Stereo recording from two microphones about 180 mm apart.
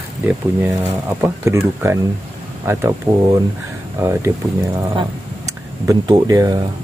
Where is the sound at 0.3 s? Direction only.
10° right (ahead or behind).